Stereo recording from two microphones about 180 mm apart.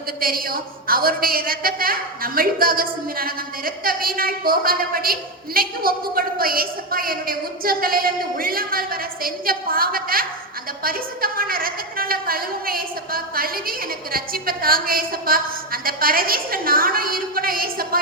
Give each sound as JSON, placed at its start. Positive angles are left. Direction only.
{"t": 0.2, "sound": "a woman's voice", "side_deg": -55}